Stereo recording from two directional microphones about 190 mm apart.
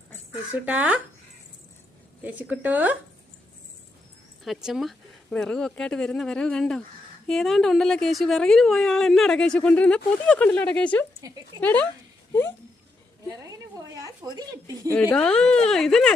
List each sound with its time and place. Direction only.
0.6 s speech: 10° right (ahead or behind)
2.2 s speech: 10° right (ahead or behind)
4.4 s a woman's voice: centre (ahead or behind)
11.2 s speech: 15° right (ahead or behind)
11.6 s speech: 10° left (ahead or behind)
13.7 s a sound: 20° right (ahead or behind)
15.1 s a woman's voice: 5° left (ahead or behind)